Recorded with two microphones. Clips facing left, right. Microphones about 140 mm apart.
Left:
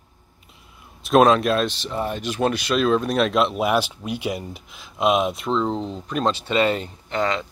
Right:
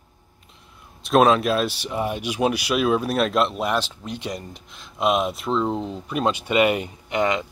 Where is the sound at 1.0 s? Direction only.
Centre (ahead or behind); by 7.4 s 20° right (ahead or behind).